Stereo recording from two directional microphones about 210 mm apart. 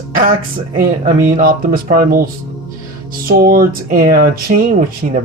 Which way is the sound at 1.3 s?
40° right (ahead or behind).